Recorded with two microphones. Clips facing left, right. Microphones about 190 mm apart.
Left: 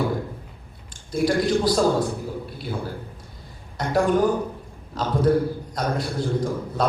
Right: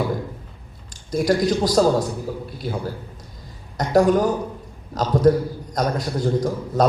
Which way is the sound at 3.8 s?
40° right (ahead or behind).